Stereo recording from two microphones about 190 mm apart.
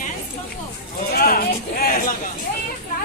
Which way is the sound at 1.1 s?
50° left (ahead or behind).